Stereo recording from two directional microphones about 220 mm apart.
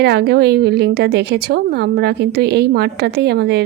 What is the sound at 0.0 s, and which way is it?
A woman's voice, 50° right (ahead or behind).